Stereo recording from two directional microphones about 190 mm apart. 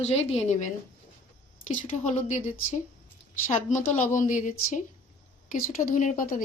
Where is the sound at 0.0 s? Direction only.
35° left (ahead or behind).